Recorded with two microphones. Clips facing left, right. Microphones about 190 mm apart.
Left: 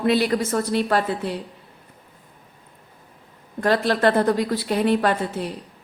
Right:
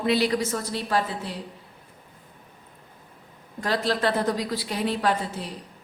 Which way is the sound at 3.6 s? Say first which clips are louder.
Left 6 dB; 55° left (ahead or behind).